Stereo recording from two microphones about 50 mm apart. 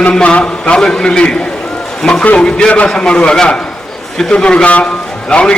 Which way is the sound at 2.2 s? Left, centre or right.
Left.